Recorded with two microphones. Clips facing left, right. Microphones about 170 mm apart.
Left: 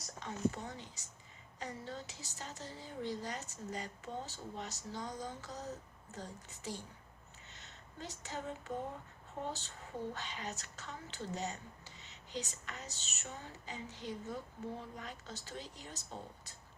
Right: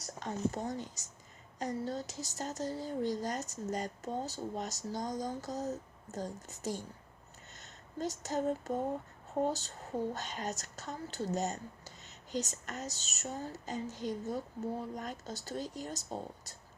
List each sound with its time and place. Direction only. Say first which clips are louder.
0.2 s a woman's voice: right 2 dB; 45° right (ahead or behind)